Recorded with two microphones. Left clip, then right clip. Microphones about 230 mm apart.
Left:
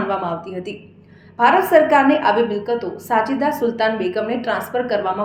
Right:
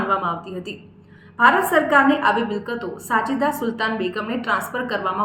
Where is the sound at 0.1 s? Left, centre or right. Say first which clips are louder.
Even; centre.